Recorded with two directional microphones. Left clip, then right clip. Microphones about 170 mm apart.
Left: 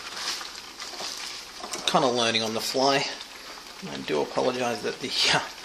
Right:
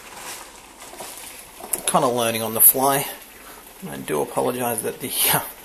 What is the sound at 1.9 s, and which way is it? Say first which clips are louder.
Speech: right 3 dB; 15° left (ahead or behind).